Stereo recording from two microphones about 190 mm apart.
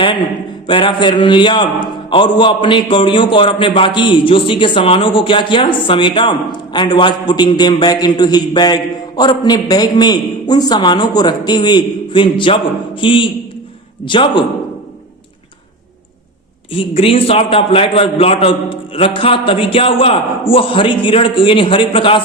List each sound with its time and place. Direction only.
0.7 s a man's voice: 25° left (ahead or behind)
16.7 s a man's voice: 30° left (ahead or behind)